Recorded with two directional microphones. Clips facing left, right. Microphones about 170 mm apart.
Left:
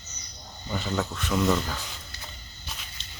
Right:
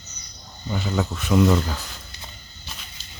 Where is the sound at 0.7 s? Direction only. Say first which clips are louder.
Right 3 dB; 5° right (ahead or behind).